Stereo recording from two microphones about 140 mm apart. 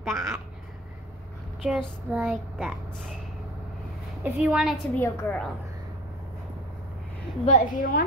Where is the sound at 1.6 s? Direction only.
5° right (ahead or behind).